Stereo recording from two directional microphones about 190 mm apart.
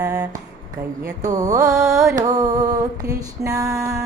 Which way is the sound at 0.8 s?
15° right (ahead or behind).